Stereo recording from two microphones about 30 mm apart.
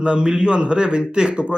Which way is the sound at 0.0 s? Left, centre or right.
Right.